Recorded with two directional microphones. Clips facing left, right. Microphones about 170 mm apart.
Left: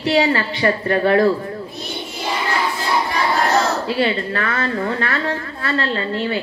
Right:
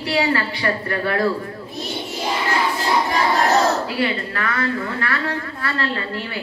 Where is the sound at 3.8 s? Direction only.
30° left (ahead or behind).